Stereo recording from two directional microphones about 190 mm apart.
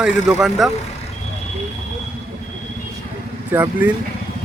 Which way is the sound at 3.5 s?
10° right (ahead or behind).